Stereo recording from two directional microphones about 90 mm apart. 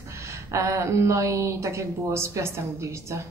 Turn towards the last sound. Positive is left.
turn(degrees=-35)  # may be behind; listen again after turning